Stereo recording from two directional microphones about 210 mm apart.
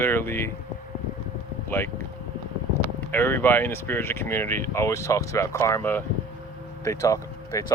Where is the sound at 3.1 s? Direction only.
10° left (ahead or behind).